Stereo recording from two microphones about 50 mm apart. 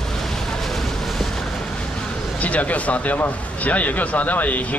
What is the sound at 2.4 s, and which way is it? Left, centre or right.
Speech, left.